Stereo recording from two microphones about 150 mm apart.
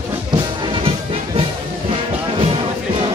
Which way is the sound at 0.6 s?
35° right (ahead or behind).